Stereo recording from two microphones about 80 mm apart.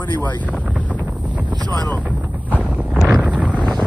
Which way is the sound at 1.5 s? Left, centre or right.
Right.